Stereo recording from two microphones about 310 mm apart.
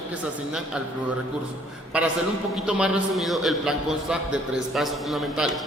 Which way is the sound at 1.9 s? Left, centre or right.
Centre.